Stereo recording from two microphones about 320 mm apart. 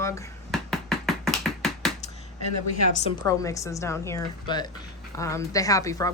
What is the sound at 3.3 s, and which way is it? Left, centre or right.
Speech, centre.